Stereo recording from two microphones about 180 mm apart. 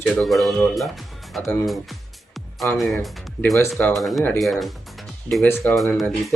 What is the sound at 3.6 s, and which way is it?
Speech, 15° left (ahead or behind).